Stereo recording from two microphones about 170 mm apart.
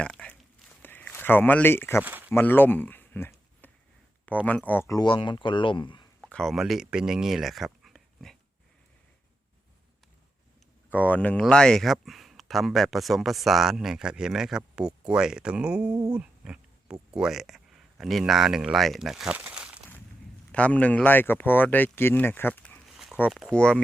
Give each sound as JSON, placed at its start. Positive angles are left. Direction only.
{"t": 0.0, "sound": "a sound", "side_deg": 5}
{"t": 0.8, "sound": "speech", "side_deg": 10}
{"t": 2.0, "sound": "speech", "side_deg": -10}
{"t": 2.3, "sound": "speech", "side_deg": 10}
{"t": 6.2, "sound": "speech", "side_deg": 5}
{"t": 10.8, "sound": "speech", "side_deg": 10}
{"t": 20.5, "sound": "speech", "side_deg": 5}
{"t": 22.9, "sound": "a sound", "side_deg": 0}
{"t": 23.3, "sound": "speech", "side_deg": 0}